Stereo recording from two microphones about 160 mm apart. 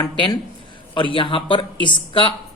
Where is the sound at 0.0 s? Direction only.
25° left (ahead or behind).